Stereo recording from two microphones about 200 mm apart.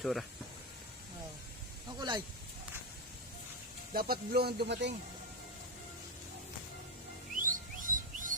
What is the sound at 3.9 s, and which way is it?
Speech, 50° right (ahead or behind).